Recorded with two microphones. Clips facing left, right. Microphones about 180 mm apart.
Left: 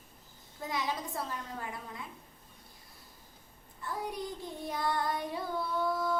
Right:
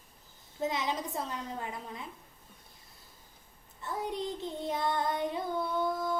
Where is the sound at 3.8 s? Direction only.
25° right (ahead or behind).